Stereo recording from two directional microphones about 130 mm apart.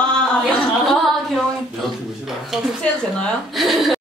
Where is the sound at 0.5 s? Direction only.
Centre (ahead or behind).